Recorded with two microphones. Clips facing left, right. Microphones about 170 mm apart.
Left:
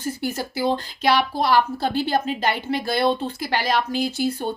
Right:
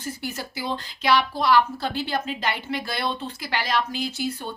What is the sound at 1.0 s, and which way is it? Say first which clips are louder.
A woman's voice: left 1 dB; 40° left (ahead or behind).